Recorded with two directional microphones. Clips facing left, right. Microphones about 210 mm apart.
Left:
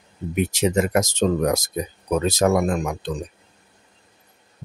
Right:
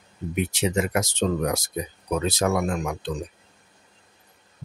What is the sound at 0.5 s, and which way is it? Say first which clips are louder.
Speech: left 5 dB; 45° left (ahead or behind).